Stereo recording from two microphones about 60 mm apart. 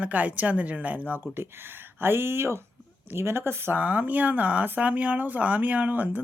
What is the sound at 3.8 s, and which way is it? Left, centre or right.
Speech, right.